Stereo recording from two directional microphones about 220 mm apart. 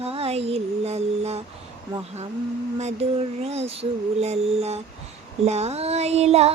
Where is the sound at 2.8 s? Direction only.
30° right (ahead or behind).